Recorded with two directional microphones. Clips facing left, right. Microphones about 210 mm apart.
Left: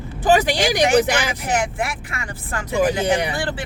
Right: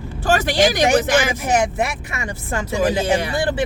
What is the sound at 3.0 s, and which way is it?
Speech, 15° left (ahead or behind).